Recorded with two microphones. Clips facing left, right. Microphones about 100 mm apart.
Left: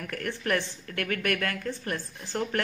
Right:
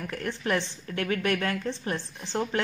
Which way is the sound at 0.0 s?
25° right (ahead or behind).